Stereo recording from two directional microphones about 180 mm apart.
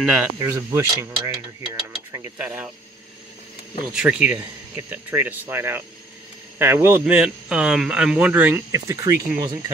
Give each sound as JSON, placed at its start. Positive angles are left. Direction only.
{"t": 0.0, "sound": "speech", "side_deg": -5}
{"t": 0.4, "sound": "speech", "side_deg": -15}
{"t": 3.9, "sound": "speech", "side_deg": -5}